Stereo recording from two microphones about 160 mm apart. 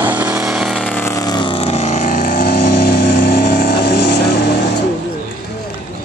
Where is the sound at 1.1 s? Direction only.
25° left (ahead or behind); by 4.3 s 90° left.